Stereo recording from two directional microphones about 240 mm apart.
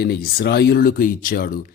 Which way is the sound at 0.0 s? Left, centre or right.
Left.